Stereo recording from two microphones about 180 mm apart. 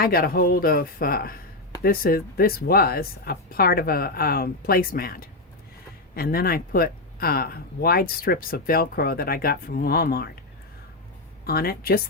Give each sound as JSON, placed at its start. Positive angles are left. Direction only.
{"t": 0.0, "sound": "speech", "side_deg": 55}
{"t": 11.4, "sound": "speech", "side_deg": 60}